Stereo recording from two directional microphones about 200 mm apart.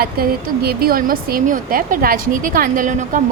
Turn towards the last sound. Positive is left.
turn(degrees=-40)  # may be behind; listen again after turning